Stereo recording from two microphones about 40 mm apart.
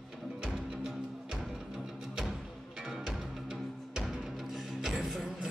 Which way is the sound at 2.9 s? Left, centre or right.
Centre.